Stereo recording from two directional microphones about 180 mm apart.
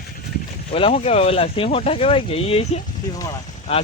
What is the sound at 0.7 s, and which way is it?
Speech, 30° left (ahead or behind).